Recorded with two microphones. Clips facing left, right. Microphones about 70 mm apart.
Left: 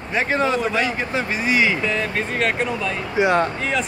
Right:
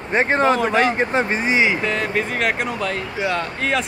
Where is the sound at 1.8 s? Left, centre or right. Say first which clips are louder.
Even; right.